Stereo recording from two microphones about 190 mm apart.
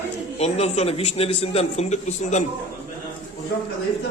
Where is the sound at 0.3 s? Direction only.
35° left (ahead or behind).